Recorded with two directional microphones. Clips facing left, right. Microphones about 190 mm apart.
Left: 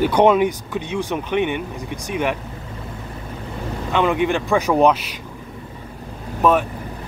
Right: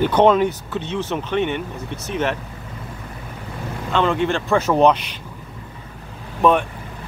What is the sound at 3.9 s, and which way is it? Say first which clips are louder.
Speech: left 1 dB; 15° left (ahead or behind).